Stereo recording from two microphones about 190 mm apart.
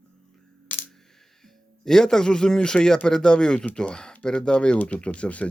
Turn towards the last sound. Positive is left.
turn(degrees=5)  # may be behind; listen again after turning